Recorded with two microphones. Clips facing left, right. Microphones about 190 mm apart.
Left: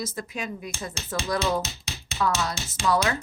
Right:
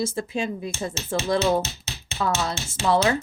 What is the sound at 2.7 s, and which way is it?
Speech, 25° right (ahead or behind).